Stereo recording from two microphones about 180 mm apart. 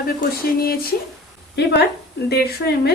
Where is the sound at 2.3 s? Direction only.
65° left (ahead or behind).